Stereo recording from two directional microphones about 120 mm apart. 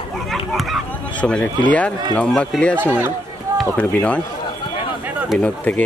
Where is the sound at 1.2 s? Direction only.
10° left (ahead or behind).